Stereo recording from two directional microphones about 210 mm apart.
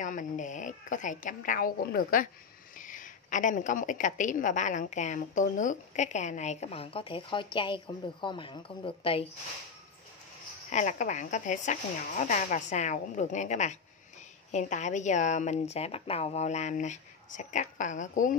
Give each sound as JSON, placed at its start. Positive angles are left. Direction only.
{"t": 0.0, "sound": "a woman's voice", "side_deg": 35}
{"t": 10.7, "sound": "a woman's voice", "side_deg": 35}